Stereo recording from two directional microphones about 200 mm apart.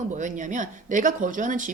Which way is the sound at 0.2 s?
40° right (ahead or behind).